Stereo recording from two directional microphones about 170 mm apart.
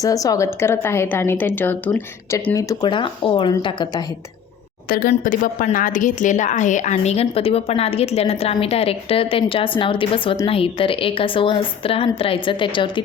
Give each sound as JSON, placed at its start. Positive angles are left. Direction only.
{"t": 0.0, "sound": "a woman's voice", "side_deg": 20}
{"t": 4.9, "sound": "a woman's voice", "side_deg": 55}